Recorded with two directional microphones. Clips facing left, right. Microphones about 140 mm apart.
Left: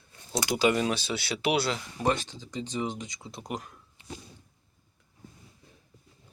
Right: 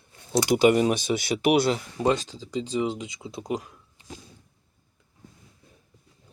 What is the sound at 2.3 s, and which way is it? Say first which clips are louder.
Speech: right 6 dB; 30° right (ahead or behind).